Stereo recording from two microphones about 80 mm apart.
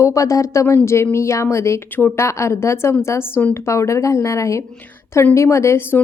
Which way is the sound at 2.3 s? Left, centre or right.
Left.